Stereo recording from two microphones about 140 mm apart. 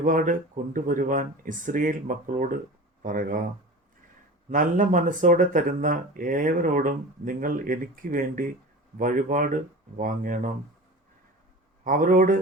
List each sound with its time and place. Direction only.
0.0 s speech: 70° right (ahead or behind)
4.4 s speech: 70° right (ahead or behind)
9.0 s speech: 70° right (ahead or behind)
11.9 s speech: 75° right (ahead or behind)